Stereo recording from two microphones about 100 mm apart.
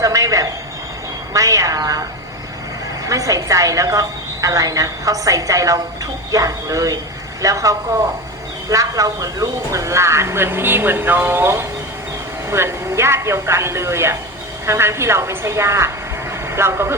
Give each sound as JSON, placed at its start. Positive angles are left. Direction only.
{"t": 0.0, "sound": "a sound", "side_deg": -35}
{"t": 1.3, "sound": "a woman's voice", "side_deg": -35}
{"t": 3.1, "sound": "a woman's voice", "side_deg": -35}